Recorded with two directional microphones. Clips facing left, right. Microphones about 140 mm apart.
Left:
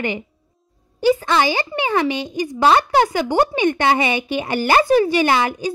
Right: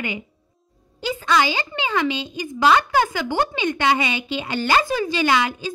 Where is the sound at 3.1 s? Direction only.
15° left (ahead or behind).